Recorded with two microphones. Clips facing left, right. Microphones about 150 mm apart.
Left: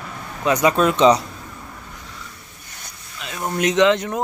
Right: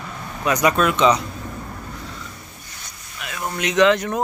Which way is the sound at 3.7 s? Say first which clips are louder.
Right 2 dB; 20° left (ahead or behind).